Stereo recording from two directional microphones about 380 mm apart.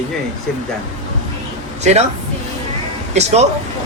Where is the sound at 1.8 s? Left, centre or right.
Centre.